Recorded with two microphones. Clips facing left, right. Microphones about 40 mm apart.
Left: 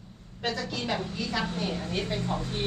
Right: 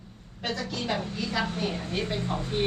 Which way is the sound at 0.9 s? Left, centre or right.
Centre.